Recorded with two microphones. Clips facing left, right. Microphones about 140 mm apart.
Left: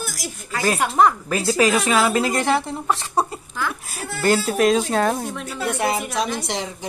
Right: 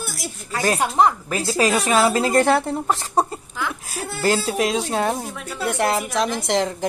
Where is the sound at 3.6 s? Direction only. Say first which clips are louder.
Even; 20° right (ahead or behind).